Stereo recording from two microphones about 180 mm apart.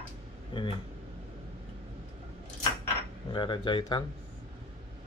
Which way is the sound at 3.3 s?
25° left (ahead or behind).